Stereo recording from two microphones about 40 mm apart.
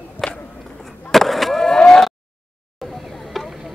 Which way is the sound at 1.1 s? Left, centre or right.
Centre.